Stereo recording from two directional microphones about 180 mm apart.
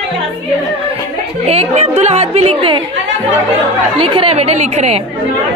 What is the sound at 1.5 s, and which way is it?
A woman's voice, 35° right (ahead or behind).